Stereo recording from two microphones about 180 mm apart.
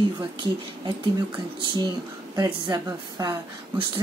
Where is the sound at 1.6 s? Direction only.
25° right (ahead or behind).